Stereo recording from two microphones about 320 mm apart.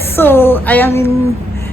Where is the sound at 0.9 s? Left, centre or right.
Centre.